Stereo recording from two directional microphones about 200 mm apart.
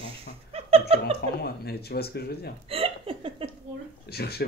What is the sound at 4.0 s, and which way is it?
Speech, 50° left (ahead or behind).